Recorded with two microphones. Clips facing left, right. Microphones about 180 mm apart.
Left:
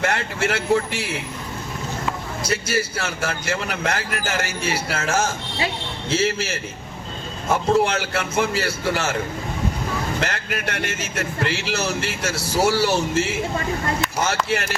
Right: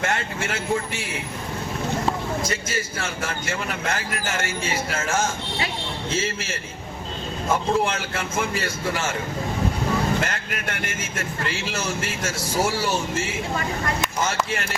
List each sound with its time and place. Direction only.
0.1 s speech: 70° left (ahead or behind)
2.4 s speech: 75° left (ahead or behind)
6.1 s speech: 75° left (ahead or behind)
10.2 s speech: 75° left (ahead or behind)